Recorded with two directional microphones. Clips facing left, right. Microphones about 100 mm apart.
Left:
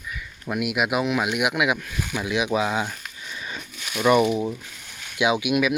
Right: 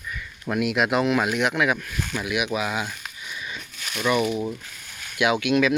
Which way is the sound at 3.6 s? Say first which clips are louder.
Left 2 dB; 5° left (ahead or behind).